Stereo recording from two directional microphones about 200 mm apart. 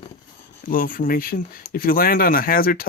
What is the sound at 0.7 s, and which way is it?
Speech, 45° left (ahead or behind).